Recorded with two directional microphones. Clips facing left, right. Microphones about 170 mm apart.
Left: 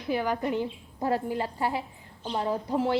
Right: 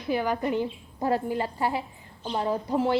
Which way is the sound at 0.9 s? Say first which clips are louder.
Right 2 dB; 25° right (ahead or behind).